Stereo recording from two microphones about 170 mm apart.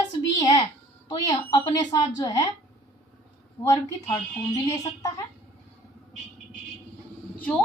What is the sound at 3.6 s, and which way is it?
A woman's voice, 20° left (ahead or behind).